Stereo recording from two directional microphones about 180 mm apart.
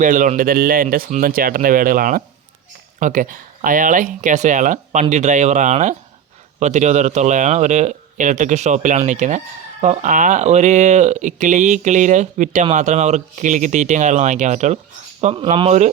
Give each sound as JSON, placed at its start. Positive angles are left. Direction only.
{"t": 0.0, "sound": "speech", "side_deg": -45}